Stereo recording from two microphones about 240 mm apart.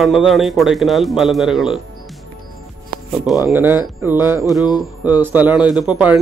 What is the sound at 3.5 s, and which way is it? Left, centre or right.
Speech, centre.